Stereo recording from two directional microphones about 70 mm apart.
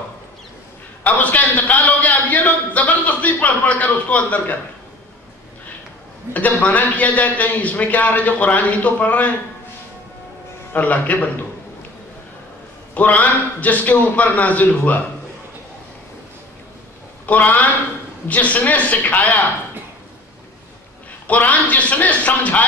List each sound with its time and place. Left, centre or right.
1.0 s a man's voice: left
6.3 s a man's voice: left
10.7 s a man's voice: left
12.9 s a man's voice: left
17.3 s a man's voice: left
21.3 s a man's voice: left